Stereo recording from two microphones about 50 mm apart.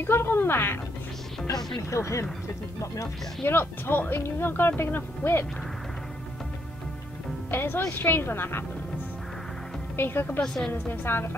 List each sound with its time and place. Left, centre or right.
0.0 s speech: left
1.8 s speech: left
3.4 s speech: left
7.5 s speech: left
9.9 s a woman's voice: left
10.4 s a woman's voice: centre
10.7 s speech: left